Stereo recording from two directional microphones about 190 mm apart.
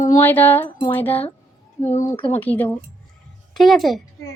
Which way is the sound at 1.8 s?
40° left (ahead or behind).